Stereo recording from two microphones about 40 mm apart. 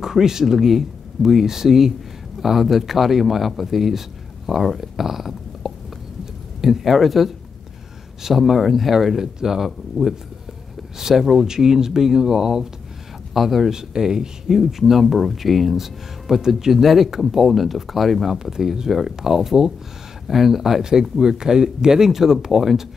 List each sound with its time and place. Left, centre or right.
0.0 s speech: centre
13.3 s speech: centre
13.7 s speech: centre
18.4 s speech: centre